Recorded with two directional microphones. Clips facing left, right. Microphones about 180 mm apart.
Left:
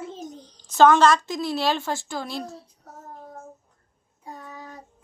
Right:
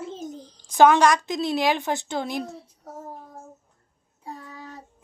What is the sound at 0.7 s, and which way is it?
A woman's voice, 15° right (ahead or behind).